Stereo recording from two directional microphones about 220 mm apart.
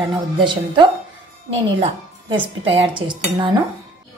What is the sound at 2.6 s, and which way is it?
A woman's voice, 25° right (ahead or behind).